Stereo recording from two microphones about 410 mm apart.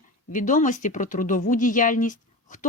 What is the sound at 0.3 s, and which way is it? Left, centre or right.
Speech, centre.